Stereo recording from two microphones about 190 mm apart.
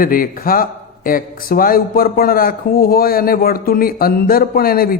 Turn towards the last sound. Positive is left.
turn(degrees=50)  # may be behind; listen again after turning